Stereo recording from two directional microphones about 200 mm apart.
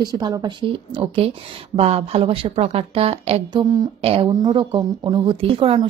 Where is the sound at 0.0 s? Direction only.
20° right (ahead or behind).